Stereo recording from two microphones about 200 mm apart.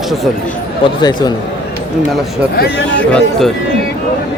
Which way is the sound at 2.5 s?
50° left (ahead or behind).